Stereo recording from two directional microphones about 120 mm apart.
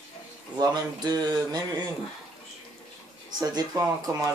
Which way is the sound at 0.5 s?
35° right (ahead or behind).